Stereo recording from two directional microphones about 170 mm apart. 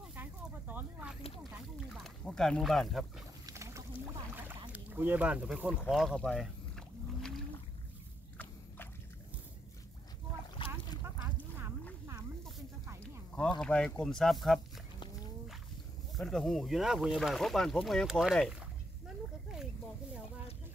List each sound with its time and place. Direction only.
0.1 s a sound: 10° right (ahead or behind)
2.0 s speech: centre (ahead or behind)
3.4 s rowboat: 15° right (ahead or behind)
4.4 s boat: 10° right (ahead or behind)
5.9 s speech: centre (ahead or behind)
7.2 s boat: centre (ahead or behind)
10.6 s boat: 30° left (ahead or behind)
13.6 s speech: 5° left (ahead or behind)
16.2 s speech: centre (ahead or behind)